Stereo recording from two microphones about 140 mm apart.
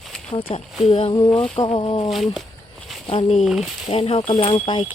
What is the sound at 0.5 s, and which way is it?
Speech, 40° left (ahead or behind).